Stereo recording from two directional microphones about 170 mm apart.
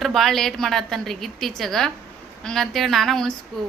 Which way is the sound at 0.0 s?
Centre (ahead or behind).